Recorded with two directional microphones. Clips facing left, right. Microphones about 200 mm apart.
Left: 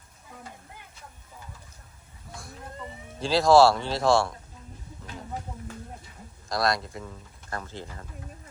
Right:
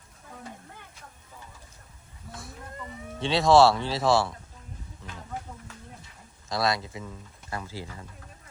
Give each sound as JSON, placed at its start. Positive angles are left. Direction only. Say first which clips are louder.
{"t": 3.2, "sound": "speech", "louder": "left 1 dB", "side_deg": 0}
{"t": 6.5, "sound": "speech", "louder": "left 1 dB", "side_deg": 0}